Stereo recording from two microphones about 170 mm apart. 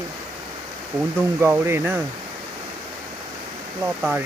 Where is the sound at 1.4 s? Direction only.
15° right (ahead or behind).